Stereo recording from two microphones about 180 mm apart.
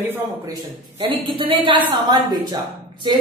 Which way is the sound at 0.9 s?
30° right (ahead or behind).